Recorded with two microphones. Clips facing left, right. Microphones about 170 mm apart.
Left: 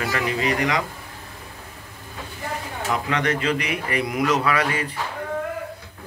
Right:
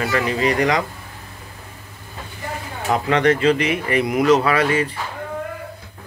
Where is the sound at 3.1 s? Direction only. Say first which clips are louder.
Right 9 dB; 30° right (ahead or behind).